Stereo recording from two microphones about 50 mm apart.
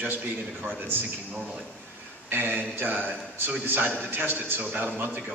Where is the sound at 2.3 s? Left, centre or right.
Right.